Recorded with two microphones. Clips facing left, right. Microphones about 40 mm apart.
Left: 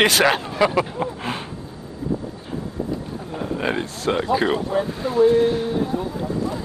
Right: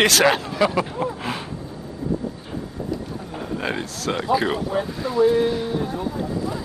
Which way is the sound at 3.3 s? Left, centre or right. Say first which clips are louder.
Left 3 dB; centre.